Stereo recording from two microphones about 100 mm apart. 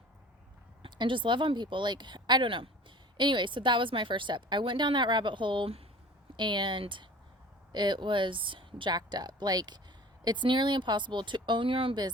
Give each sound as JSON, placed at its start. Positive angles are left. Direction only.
{"t": 0.8, "sound": "a woman's voice", "side_deg": -50}
{"t": 6.3, "sound": "a woman's voice", "side_deg": -50}